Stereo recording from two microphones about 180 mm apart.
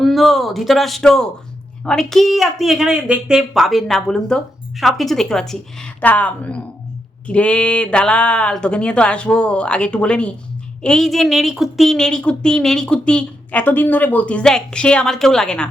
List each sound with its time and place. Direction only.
0.0 s a man's voice: centre (ahead or behind)